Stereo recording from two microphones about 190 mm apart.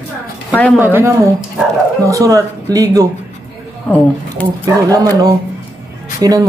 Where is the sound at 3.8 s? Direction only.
10° left (ahead or behind).